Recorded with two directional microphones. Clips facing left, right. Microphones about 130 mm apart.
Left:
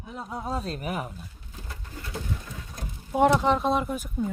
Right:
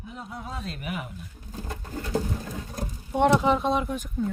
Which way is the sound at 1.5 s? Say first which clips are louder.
Right 9 dB; 40° right (ahead or behind).